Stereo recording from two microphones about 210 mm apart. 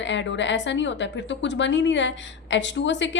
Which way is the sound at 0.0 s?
60° left (ahead or behind).